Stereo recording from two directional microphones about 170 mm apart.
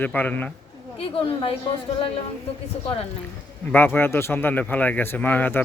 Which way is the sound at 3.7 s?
10° left (ahead or behind).